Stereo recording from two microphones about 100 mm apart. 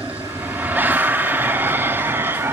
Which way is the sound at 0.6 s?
20° right (ahead or behind).